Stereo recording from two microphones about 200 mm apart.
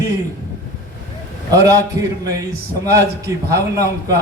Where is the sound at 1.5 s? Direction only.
15° right (ahead or behind).